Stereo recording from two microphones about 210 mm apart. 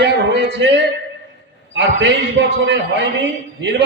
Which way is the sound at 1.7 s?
55° right (ahead or behind).